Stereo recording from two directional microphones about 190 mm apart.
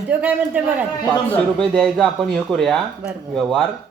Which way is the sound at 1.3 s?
5° left (ahead or behind).